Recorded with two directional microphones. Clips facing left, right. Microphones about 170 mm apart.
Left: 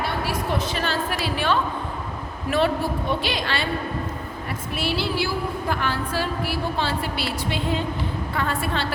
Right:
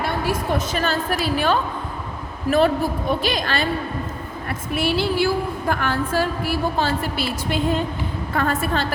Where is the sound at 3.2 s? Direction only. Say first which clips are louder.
Right 3 dB; 45° right (ahead or behind).